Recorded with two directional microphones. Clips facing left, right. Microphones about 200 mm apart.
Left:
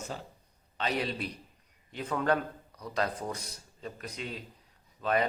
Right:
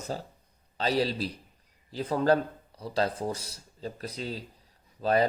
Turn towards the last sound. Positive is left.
turn(degrees=-35)  # may be behind; listen again after turning